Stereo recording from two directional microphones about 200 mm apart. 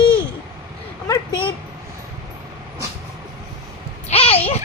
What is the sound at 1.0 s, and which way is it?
Speech, 15° left (ahead or behind).